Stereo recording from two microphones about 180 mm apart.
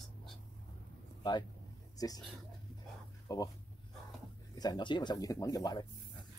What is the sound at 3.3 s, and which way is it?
Speech, 20° left (ahead or behind).